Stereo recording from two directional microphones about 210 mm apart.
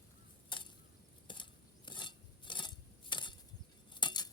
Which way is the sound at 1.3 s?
20° left (ahead or behind).